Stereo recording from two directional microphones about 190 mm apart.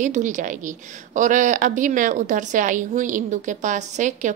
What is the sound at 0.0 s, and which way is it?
A woman's voice, 40° right (ahead or behind).